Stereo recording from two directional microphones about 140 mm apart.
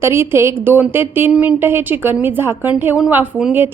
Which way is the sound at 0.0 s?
20° right (ahead or behind).